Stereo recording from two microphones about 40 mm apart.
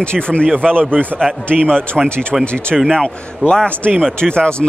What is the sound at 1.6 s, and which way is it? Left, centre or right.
Speech, centre.